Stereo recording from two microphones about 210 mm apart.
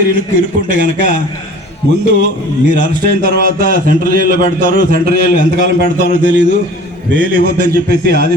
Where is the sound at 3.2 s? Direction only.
40° right (ahead or behind).